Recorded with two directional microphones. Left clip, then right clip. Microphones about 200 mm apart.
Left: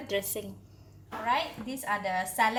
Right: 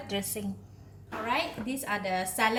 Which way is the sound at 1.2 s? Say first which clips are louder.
Left 1 dB; centre (ahead or behind).